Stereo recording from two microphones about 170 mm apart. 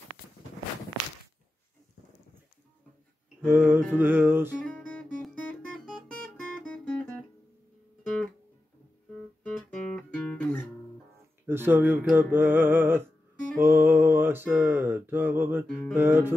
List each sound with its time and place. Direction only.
3.4 s mantra: 10° right (ahead or behind)
4.6 s guitar: 5° left (ahead or behind)
6.6 s music: 10° left (ahead or behind)
9.1 s guitar: 5° left (ahead or behind)
11.4 s mantra: 15° right (ahead or behind)